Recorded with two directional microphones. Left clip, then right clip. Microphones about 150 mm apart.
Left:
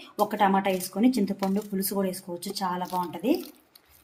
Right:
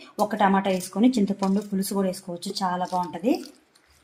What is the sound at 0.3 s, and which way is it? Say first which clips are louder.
Speech: right 2 dB; 30° right (ahead or behind).